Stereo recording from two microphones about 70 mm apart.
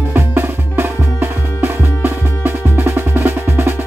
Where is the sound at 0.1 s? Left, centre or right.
Right.